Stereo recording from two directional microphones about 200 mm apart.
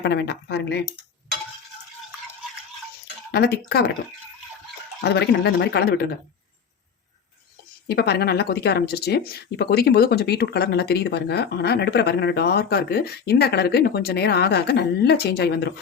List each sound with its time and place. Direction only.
0.0 s speech: 55° left (ahead or behind)
3.3 s speech: 55° left (ahead or behind)
4.9 s speech: 55° left (ahead or behind)
7.9 s speech: 55° left (ahead or behind)